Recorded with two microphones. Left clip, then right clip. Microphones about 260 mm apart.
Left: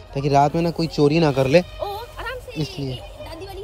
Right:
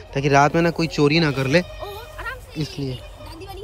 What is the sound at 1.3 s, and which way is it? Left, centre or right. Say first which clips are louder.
Speech: left 4 dB; right.